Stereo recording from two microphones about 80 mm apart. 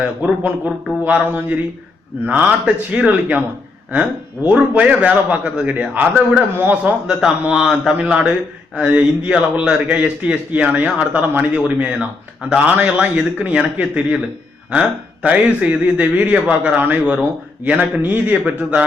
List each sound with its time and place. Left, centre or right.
0.2 s a man's voice: centre
4.4 s a man's voice: centre
7.1 s a man's voice: centre